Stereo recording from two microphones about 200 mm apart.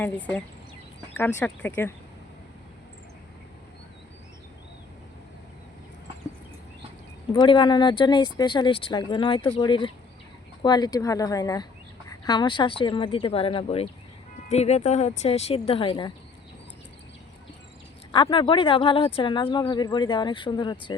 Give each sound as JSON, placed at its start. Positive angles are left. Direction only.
{"t": 0.0, "sound": "speech", "side_deg": 10}
{"t": 7.3, "sound": "speech", "side_deg": 25}
{"t": 18.1, "sound": "speech", "side_deg": 25}